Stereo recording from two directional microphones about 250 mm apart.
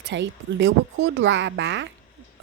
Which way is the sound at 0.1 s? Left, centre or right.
Right.